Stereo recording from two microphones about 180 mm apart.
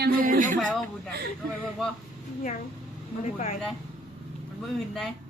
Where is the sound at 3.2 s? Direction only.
40° left (ahead or behind).